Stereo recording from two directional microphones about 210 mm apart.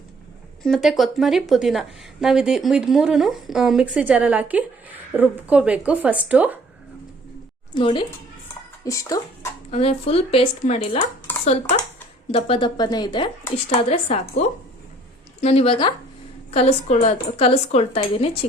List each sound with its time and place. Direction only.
0.6 s a woman's voice: centre (ahead or behind)
7.7 s speech: 25° left (ahead or behind)
9.7 s speech: 30° left (ahead or behind)
12.3 s speech: 25° left (ahead or behind)